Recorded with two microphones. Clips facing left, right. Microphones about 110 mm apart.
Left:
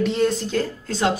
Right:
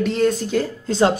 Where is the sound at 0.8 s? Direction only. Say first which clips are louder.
Right 7 dB; 30° right (ahead or behind).